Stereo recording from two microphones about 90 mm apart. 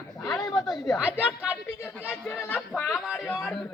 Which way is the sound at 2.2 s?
20° left (ahead or behind).